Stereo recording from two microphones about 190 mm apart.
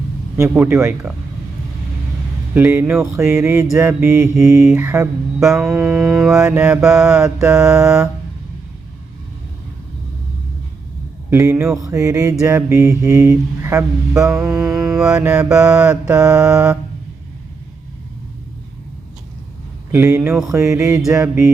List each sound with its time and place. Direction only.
0.3 s mantra: 10° right (ahead or behind)
2.6 s mantra: 10° right (ahead or behind)
5.5 s mantra: centre (ahead or behind)
11.3 s mantra: 15° right (ahead or behind)
14.7 s mantra: centre (ahead or behind)
19.9 s mantra: 10° right (ahead or behind)